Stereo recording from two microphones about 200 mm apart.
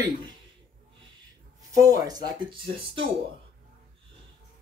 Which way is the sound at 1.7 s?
15° right (ahead or behind).